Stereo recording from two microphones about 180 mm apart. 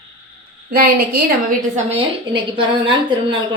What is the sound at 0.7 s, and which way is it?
Speech, 55° right (ahead or behind).